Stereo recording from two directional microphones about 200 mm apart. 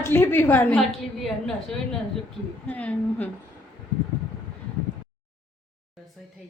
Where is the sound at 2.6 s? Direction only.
5° left (ahead or behind).